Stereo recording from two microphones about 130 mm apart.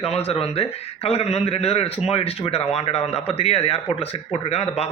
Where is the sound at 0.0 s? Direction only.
50° left (ahead or behind).